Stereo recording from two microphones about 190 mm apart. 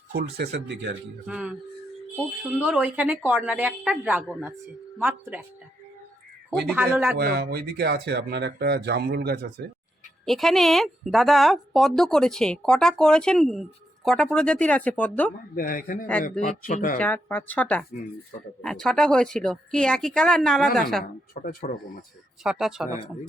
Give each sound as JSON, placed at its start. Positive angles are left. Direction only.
{"t": 0.1, "sound": "speech", "side_deg": -60}
{"t": 1.3, "sound": "speech", "side_deg": -5}
{"t": 6.7, "sound": "speech", "side_deg": -10}
{"t": 7.2, "sound": "speech", "side_deg": -55}
{"t": 10.2, "sound": "a woman's voice", "side_deg": 0}
{"t": 15.5, "sound": "speech", "side_deg": 45}
{"t": 17.0, "sound": "a woman's voice", "side_deg": 10}
{"t": 21.4, "sound": "speech", "side_deg": 50}
{"t": 22.4, "sound": "a woman's voice", "side_deg": 0}